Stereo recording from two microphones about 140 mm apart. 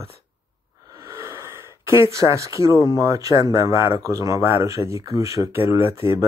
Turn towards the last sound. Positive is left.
turn(degrees=-20)  # may be behind; listen again after turning